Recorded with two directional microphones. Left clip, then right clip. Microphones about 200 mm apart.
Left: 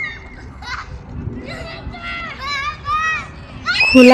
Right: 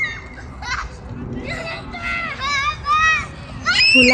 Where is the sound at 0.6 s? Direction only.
10° left (ahead or behind).